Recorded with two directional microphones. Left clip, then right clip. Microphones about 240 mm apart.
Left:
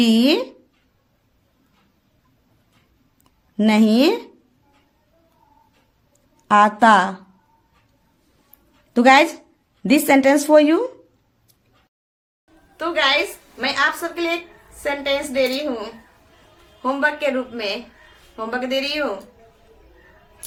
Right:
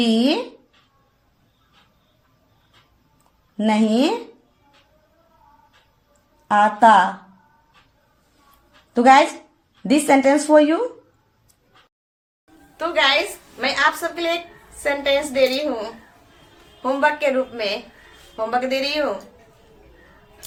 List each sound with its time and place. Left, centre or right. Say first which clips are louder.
3.6 s a woman's voice: left 2 dB; left
6.5 s a woman's voice: even; left
9.0 s a woman's voice: even; left
12.7 s a woman's voice: right 1 dB; centre